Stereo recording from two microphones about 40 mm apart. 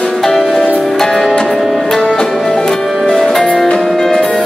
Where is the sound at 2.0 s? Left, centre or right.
Left.